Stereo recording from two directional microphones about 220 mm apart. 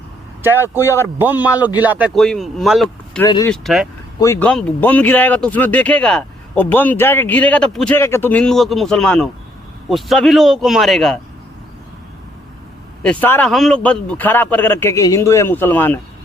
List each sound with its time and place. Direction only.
1.2 s a man's voice: 10° right (ahead or behind)
3.2 s speech: 20° left (ahead or behind)
3.5 s speech: centre (ahead or behind)
13.0 s speech: 5° left (ahead or behind)